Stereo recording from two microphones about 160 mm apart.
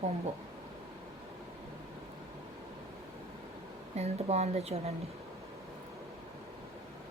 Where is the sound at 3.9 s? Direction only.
40° right (ahead or behind).